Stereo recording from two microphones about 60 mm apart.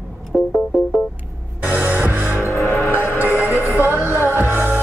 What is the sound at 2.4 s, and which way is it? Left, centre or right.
Music, left.